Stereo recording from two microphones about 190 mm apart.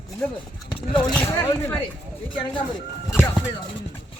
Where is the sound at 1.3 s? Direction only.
15° left (ahead or behind).